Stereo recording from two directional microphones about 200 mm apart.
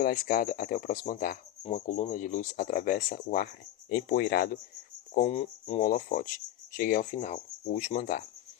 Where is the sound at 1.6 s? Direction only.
35° left (ahead or behind).